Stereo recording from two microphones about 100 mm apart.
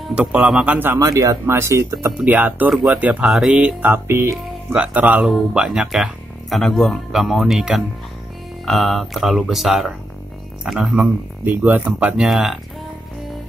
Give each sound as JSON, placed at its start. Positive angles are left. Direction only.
{"t": 0.1, "sound": "music", "side_deg": -10}
{"t": 0.7, "sound": "speech", "side_deg": -20}
{"t": 0.9, "sound": "speech", "side_deg": -35}
{"t": 2.2, "sound": "music", "side_deg": -15}
{"t": 3.3, "sound": "music", "side_deg": -5}
{"t": 6.5, "sound": "speech", "side_deg": 0}
{"t": 10.6, "sound": "music", "side_deg": -5}
{"t": 11.4, "sound": "music", "side_deg": -20}
{"t": 12.3, "sound": "speech", "side_deg": 0}